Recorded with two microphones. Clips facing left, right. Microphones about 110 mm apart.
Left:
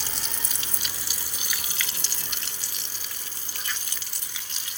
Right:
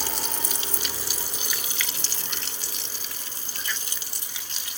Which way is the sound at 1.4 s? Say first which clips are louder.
Right 2 dB; 25° right (ahead or behind).